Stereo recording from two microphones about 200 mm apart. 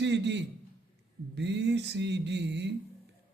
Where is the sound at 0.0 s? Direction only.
60° right (ahead or behind).